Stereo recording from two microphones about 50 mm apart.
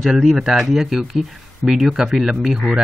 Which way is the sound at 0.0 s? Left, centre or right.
Centre.